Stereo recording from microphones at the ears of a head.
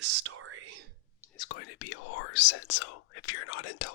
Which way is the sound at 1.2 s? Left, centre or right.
Left.